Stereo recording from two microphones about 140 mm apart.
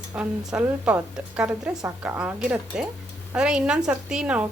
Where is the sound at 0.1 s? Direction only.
10° right (ahead or behind).